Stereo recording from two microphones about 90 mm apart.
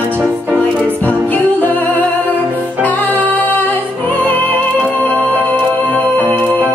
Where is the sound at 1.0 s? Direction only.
20° left (ahead or behind).